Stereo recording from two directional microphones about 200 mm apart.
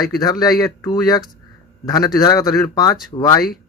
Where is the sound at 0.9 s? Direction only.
20° left (ahead or behind).